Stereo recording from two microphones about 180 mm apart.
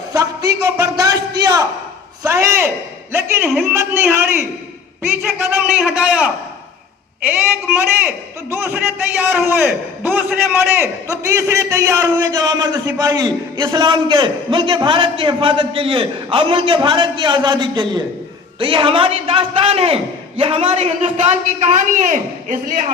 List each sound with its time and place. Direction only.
0.1 s a man's voice: 20° right (ahead or behind)
5.8 s a man's voice: 5° right (ahead or behind); by 22.9 s 45° right (ahead or behind)